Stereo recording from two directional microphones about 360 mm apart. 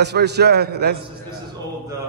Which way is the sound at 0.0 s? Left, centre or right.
Right.